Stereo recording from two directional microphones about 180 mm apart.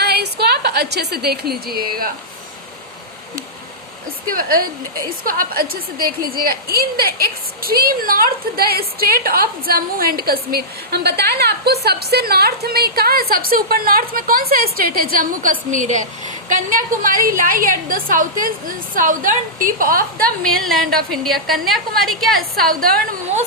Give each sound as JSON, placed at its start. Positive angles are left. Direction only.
{"t": 0.0, "sound": "a woman's voice", "side_deg": -65}
{"t": 4.3, "sound": "a woman's voice", "side_deg": -55}
{"t": 20.4, "sound": "a woman's voice", "side_deg": 0}
{"t": 22.4, "sound": "a woman's voice", "side_deg": -55}